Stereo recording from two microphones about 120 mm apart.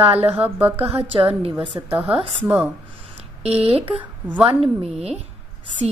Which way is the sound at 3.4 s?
55° right (ahead or behind).